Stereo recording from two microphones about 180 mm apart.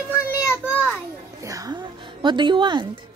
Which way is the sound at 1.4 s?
20° right (ahead or behind).